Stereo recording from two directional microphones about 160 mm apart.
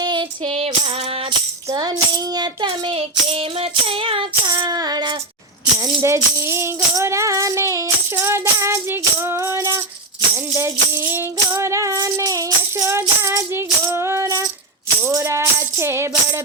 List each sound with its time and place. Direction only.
0.0 s female singing: 30° right (ahead or behind)
1.7 s child singing: 25° right (ahead or behind)
5.8 s music: 20° right (ahead or behind)